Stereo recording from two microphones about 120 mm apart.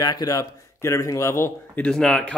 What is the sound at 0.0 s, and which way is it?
Speech, 35° left (ahead or behind).